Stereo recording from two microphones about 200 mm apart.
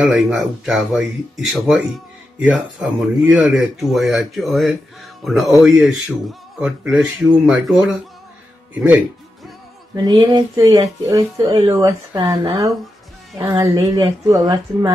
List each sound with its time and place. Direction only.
0.1 s speech: centre (ahead or behind)
9.9 s speech: 20° right (ahead or behind)
11.7 s speech: 15° right (ahead or behind)